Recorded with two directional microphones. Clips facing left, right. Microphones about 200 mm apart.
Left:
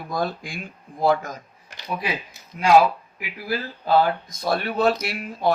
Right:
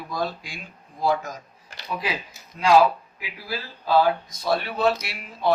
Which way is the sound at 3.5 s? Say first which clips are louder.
Left 2 dB; 55° left (ahead or behind).